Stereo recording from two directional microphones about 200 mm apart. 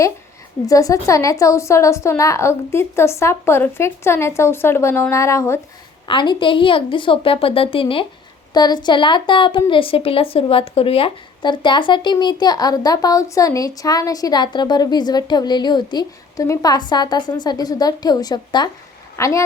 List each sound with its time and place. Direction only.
0.7 s a woman's voice: 15° left (ahead or behind)